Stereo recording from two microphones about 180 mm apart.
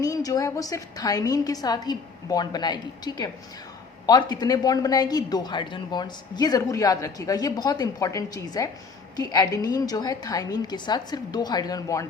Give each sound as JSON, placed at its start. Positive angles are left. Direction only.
{"t": 0.0, "sound": "speech", "side_deg": 20}